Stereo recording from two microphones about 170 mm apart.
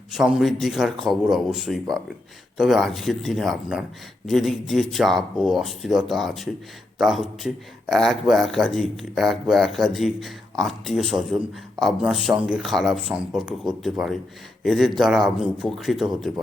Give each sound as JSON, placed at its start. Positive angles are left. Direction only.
{"t": 0.1, "sound": "a man's voice", "side_deg": 0}